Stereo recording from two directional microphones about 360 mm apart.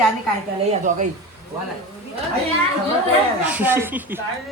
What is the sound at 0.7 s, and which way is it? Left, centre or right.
Speech, right.